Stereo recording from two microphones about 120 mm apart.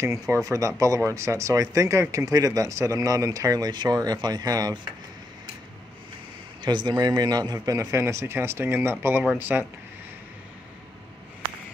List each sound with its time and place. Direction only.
0.0 s speech: 25° right (ahead or behind)
6.6 s speech: 40° right (ahead or behind); by 9.7 s 15° right (ahead or behind)